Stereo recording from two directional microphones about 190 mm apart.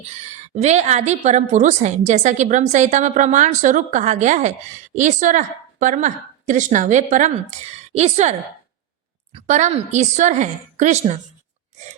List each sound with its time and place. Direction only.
0.1 s a woman's voice: 35° right (ahead or behind)